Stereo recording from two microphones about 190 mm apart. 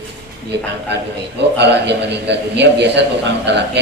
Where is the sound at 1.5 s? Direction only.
65° right (ahead or behind).